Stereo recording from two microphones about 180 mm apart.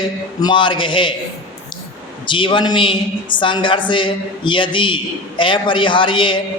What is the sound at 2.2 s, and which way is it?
Speech, 25° left (ahead or behind).